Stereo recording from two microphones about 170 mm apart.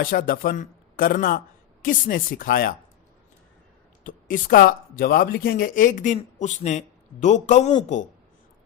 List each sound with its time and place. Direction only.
0.0 s speech: 55° left (ahead or behind)
4.0 s speech: 55° left (ahead or behind)